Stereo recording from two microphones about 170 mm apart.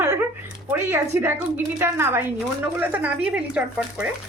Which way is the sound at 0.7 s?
15° right (ahead or behind).